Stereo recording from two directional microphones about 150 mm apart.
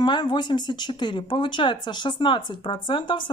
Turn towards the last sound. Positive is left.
turn(degrees=35)  # may be behind; listen again after turning